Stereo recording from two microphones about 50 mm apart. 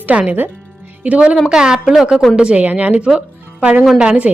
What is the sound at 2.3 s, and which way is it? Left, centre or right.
Speech, right.